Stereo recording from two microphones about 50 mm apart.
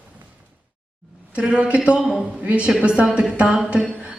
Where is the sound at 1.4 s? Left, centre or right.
Centre.